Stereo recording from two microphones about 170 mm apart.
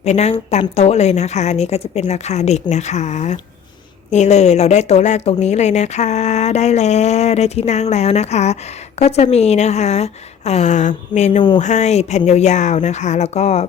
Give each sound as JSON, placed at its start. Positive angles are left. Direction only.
{"t": 0.0, "sound": "speech", "side_deg": 40}